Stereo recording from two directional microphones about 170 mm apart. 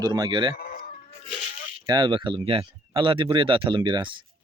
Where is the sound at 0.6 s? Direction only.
60° left (ahead or behind).